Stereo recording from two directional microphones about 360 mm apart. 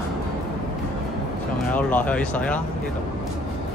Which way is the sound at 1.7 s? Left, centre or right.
Centre.